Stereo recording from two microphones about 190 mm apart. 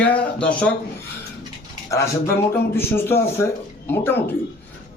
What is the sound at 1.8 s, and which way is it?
Speech, 15° left (ahead or behind).